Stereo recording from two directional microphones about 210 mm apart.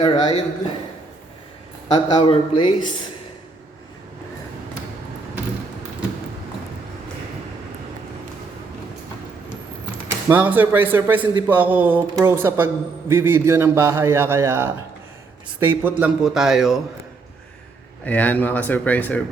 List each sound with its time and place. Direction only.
0.0 s speech: 20° left (ahead or behind)
1.9 s speech: 20° left (ahead or behind)
10.1 s a man's voice: 10° right (ahead or behind)
18.0 s speech: 5° left (ahead or behind)